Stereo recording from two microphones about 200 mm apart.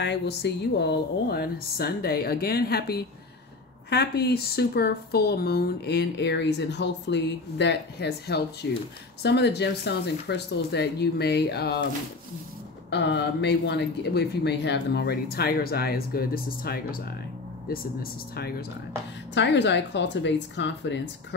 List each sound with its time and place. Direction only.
0.0 s speech: 60° left (ahead or behind)
12.9 s speech: 60° left (ahead or behind)
18.3 s speech: 50° left (ahead or behind)
19.3 s speech: 60° left (ahead or behind)